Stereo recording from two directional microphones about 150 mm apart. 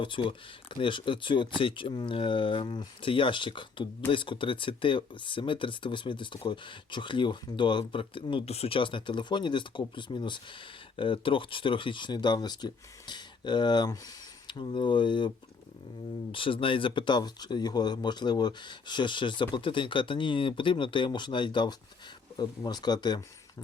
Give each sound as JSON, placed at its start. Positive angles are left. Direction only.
{"t": 0.0, "sound": "speech", "side_deg": 35}
{"t": 16.3, "sound": "speech", "side_deg": 35}